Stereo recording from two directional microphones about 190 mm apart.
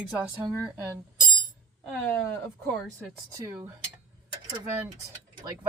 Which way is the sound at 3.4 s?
15° right (ahead or behind).